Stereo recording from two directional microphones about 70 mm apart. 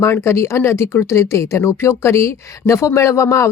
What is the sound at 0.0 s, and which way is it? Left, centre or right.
Speech, left.